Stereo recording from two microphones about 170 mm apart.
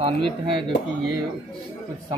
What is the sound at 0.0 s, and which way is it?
Speech, 30° right (ahead or behind).